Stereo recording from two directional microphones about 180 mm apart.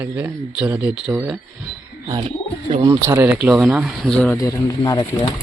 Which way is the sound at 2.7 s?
20° right (ahead or behind).